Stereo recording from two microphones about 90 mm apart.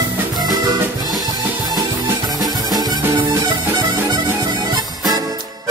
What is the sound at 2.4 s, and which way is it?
Music, 45° right (ahead or behind).